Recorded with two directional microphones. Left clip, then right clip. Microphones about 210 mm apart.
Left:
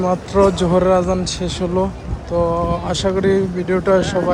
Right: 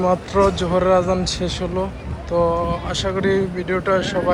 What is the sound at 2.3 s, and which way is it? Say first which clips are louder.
Speech: left 1 dB; 15° left (ahead or behind).